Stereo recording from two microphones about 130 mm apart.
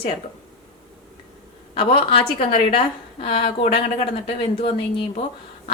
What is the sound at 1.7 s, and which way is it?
A woman's voice, 45° left (ahead or behind).